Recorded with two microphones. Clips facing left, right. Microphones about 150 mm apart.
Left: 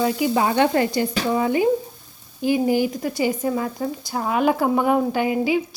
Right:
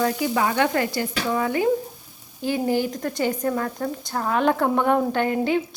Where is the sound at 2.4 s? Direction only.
15° left (ahead or behind).